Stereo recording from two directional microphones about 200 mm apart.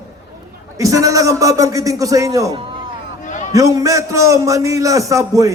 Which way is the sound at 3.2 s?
40° left (ahead or behind).